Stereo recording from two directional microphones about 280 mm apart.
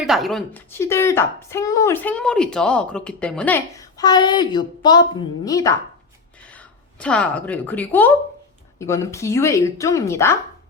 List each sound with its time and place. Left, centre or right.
0.0 s a woman's voice: centre